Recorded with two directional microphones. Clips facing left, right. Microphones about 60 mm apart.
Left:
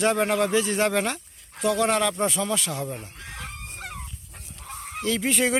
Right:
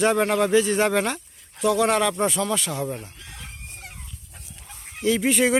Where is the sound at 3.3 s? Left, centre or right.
Left.